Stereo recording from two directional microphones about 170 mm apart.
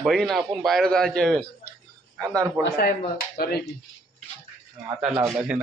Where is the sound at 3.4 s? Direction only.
65° left (ahead or behind).